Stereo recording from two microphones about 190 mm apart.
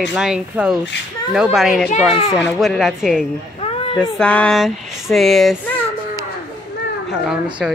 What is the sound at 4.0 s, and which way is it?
Speech, 5° left (ahead or behind).